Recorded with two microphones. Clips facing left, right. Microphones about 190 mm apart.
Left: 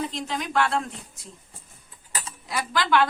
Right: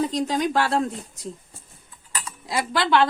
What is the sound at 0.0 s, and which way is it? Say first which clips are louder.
Speech: right 7 dB; 40° right (ahead or behind).